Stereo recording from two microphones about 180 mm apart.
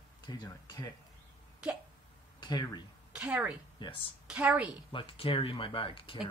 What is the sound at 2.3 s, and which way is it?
Speech, 25° left (ahead or behind).